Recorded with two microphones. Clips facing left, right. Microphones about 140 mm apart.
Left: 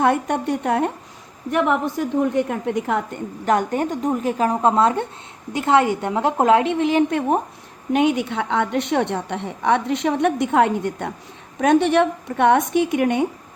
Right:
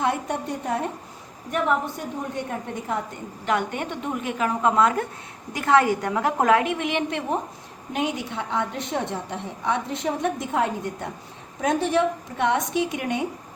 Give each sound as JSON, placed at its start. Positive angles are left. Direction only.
{"t": 0.0, "sound": "a woman's voice", "side_deg": 60}
{"t": 1.5, "sound": "a woman's voice", "side_deg": 90}
{"t": 3.4, "sound": "a woman's voice", "side_deg": 40}
{"t": 7.1, "sound": "a woman's voice", "side_deg": 50}
{"t": 7.9, "sound": "a woman's voice", "side_deg": 65}